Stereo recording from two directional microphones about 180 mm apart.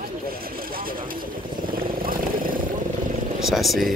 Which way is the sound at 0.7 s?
55° right (ahead or behind).